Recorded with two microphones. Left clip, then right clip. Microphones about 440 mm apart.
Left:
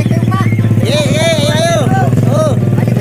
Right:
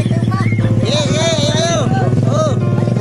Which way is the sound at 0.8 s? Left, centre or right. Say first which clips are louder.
Left 4 dB; right.